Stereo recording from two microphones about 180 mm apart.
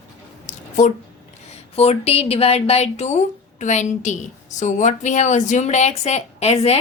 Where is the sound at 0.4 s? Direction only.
45° left (ahead or behind).